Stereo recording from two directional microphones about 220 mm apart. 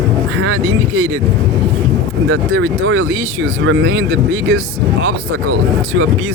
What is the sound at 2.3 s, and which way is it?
Speech, 60° right (ahead or behind).